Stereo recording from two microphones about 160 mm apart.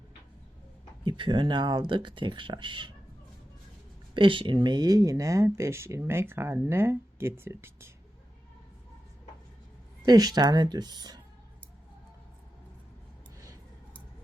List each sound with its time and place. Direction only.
1.0 s speech: 30° right (ahead or behind)
4.1 s speech: 30° right (ahead or behind); by 7.9 s 15° right (ahead or behind)
10.1 s speech: 25° right (ahead or behind)